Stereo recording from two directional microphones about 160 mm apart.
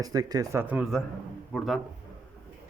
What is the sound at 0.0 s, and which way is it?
Speech, 25° right (ahead or behind).